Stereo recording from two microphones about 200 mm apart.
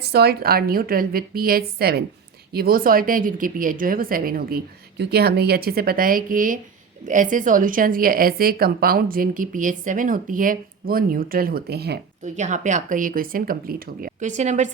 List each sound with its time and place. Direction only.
0.0 s a woman's voice: 55° right (ahead or behind)
12.2 s a woman's voice: 35° right (ahead or behind)